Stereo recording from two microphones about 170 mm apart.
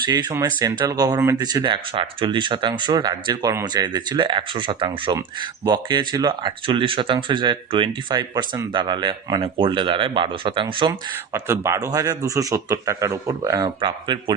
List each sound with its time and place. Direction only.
0.0 s speech: 25° right (ahead or behind)
11.4 s speech: 15° right (ahead or behind)